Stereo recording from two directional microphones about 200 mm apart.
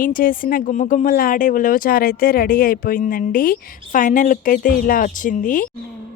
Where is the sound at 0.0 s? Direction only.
45° left (ahead or behind).